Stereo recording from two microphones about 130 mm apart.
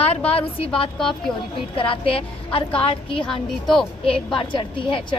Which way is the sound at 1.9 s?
45° left (ahead or behind).